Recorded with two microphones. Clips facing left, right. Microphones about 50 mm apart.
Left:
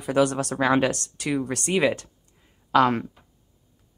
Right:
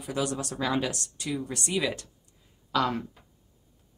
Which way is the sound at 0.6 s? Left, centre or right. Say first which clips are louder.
Left 8 dB; left.